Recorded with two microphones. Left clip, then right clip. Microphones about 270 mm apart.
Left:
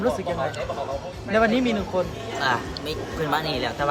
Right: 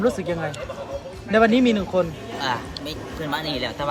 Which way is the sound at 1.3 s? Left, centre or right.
Right.